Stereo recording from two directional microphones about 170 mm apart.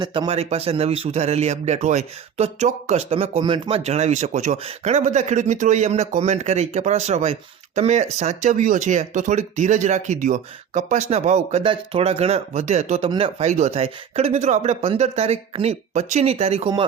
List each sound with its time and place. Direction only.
0.0 s a man's voice: 30° right (ahead or behind)